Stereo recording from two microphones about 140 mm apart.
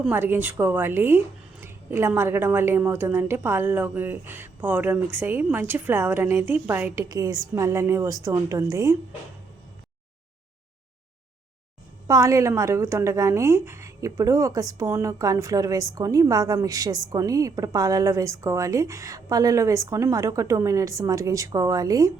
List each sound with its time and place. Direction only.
0.1 s a woman's voice: 15° right (ahead or behind)
12.0 s a woman's voice: 25° right (ahead or behind)